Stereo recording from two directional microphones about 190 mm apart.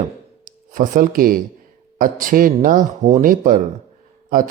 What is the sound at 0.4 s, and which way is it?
Speech, 45° right (ahead or behind).